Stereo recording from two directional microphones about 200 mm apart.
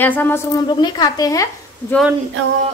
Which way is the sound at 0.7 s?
20° left (ahead or behind).